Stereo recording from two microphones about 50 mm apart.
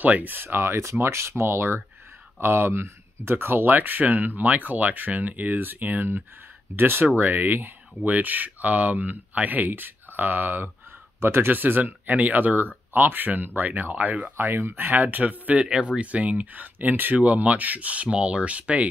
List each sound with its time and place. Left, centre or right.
0.0 s speech: right
11.1 s speech: right
14.3 s speech: right